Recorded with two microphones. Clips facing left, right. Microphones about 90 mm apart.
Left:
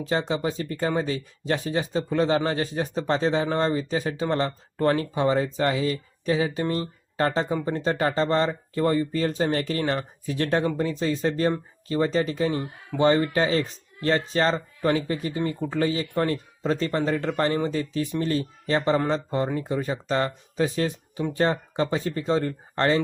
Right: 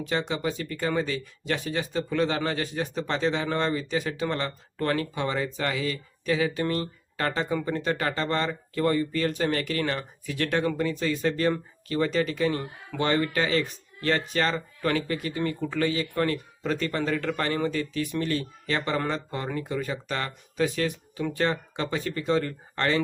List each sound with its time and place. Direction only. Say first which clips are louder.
0.0 s speech: left 3 dB; 30° left (ahead or behind)